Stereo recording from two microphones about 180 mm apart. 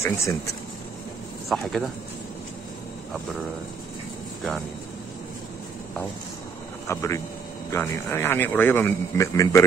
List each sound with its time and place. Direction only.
0.0 s a man's voice: 15° left (ahead or behind)
1.5 s speech: centre (ahead or behind)
6.9 s a man's voice: 15° left (ahead or behind)